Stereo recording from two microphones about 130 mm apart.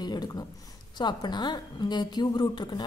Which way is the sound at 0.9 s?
35° left (ahead or behind).